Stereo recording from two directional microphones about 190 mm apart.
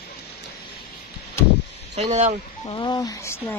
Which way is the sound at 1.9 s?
35° right (ahead or behind).